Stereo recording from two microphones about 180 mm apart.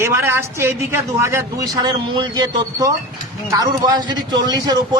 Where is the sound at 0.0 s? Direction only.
15° right (ahead or behind).